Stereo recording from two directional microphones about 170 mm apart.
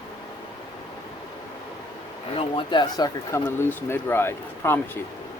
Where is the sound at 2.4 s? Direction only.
30° left (ahead or behind); by 5.0 s 15° left (ahead or behind).